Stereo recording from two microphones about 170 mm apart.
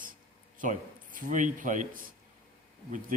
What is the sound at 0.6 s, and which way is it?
Speech, 50° right (ahead or behind).